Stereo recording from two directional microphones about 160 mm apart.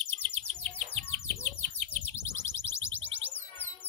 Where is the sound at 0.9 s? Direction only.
15° left (ahead or behind).